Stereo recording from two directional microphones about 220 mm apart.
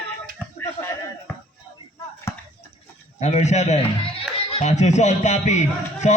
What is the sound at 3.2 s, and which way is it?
A man's voice, 30° left (ahead or behind).